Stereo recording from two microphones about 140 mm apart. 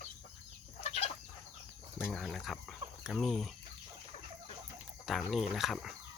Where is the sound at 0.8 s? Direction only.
45° left (ahead or behind).